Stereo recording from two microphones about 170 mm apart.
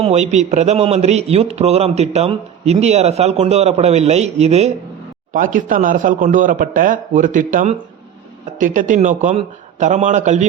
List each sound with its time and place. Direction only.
0.0 s a man's voice: 40° right (ahead or behind)
5.3 s speech: 50° right (ahead or behind)